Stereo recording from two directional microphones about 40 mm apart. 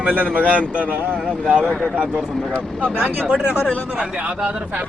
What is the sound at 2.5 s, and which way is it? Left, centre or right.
Speech, left.